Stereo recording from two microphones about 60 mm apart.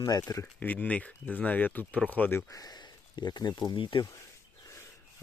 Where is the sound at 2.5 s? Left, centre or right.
Left.